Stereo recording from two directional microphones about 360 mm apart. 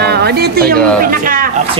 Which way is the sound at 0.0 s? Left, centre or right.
Right.